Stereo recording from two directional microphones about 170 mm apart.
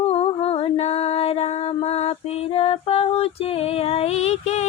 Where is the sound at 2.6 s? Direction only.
35° left (ahead or behind).